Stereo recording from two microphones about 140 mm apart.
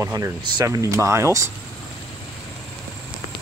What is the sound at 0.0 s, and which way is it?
Speech, 20° right (ahead or behind).